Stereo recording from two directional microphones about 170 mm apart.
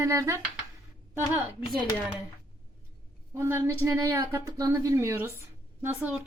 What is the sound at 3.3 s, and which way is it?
Speech, 15° right (ahead or behind).